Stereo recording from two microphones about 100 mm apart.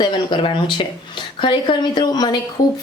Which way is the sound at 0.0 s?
55° left (ahead or behind).